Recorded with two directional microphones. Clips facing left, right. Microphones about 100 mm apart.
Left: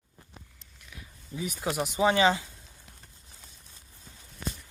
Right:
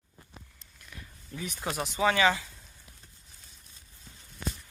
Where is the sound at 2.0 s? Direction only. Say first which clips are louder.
Left 2 dB; 25° left (ahead or behind).